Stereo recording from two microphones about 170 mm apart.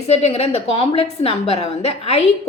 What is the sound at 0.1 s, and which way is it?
A woman's voice, 35° left (ahead or behind).